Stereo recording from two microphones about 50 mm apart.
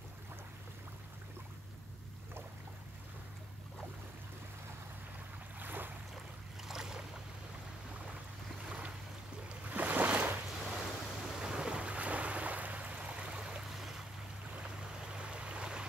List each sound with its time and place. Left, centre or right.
5.6 s boat: right
6.7 s boat: centre
8.6 s boat: centre
9.5 s waves: right
10.5 s waves: centre
13.6 s boat: centre
15.1 s a sound: right